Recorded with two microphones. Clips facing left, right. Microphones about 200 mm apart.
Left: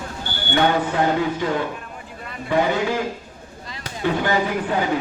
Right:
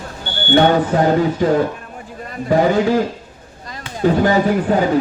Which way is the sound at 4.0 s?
40° right (ahead or behind).